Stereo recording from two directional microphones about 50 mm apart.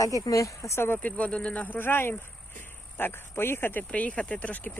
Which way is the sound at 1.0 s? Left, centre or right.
Left.